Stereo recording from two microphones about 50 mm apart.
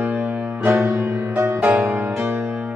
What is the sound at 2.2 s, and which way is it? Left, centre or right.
Music, right.